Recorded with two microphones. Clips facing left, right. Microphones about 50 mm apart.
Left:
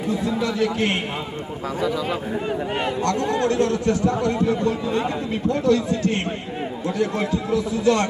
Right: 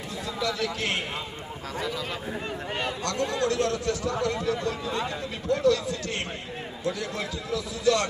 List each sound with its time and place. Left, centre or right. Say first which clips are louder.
0.1 s a man's voice: left 7 dB; left
2.8 s a man's voice: left 4 dB; left